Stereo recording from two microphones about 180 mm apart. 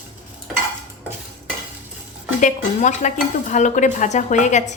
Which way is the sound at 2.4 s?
45° left (ahead or behind).